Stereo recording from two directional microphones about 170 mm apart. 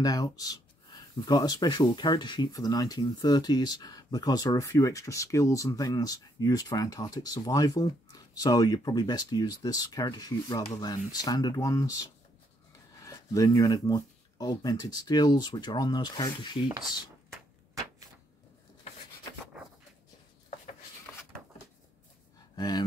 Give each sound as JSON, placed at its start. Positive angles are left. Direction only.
{"t": 0.0, "sound": "speech", "side_deg": 20}
{"t": 22.6, "sound": "speech", "side_deg": 25}